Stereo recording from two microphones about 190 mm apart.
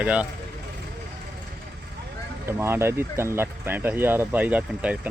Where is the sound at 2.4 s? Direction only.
15° right (ahead or behind).